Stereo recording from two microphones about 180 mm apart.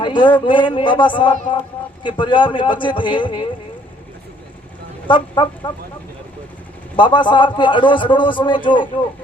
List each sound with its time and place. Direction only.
0.0 s a man's voice: 25° left (ahead or behind)
5.0 s a man's voice: 25° left (ahead or behind)
6.9 s a man's voice: 25° left (ahead or behind)